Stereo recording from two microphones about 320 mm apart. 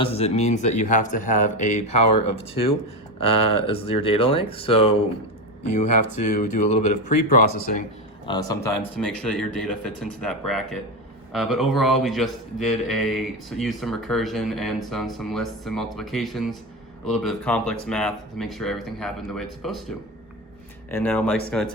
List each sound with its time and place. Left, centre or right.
0.0 s speech: centre
3.2 s speech: left
3.5 s speech: centre
8.3 s speech: centre
20.9 s speech: centre